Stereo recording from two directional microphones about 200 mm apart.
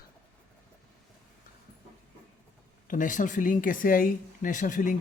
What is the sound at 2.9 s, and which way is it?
Speech, 40° left (ahead or behind).